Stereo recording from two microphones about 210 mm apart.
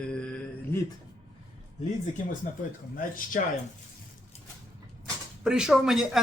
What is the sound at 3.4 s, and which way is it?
Speech, 40° left (ahead or behind).